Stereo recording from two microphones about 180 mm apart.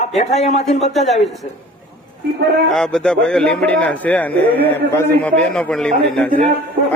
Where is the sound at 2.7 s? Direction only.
5° left (ahead or behind).